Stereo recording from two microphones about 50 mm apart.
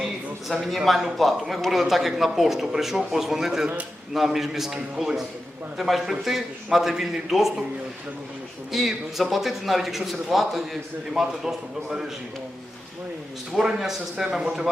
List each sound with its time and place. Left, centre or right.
0.0 s a man's voice: centre
8.7 s a man's voice: centre
13.6 s a man's voice: centre
14.3 s a man's voice: right